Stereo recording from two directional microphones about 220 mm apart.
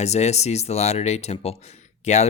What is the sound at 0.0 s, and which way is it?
Speech, 30° left (ahead or behind).